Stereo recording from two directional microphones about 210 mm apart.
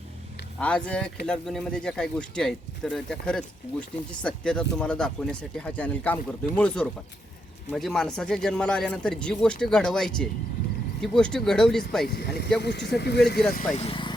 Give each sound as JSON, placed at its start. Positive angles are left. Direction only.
{"t": 0.6, "sound": "speech", "side_deg": 5}
{"t": 12.0, "sound": "speech", "side_deg": 55}
{"t": 13.7, "sound": "speech", "side_deg": 25}